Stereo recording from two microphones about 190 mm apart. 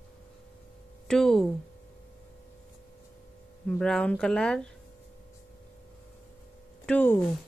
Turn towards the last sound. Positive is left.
turn(degrees=10)  # may be behind; listen again after turning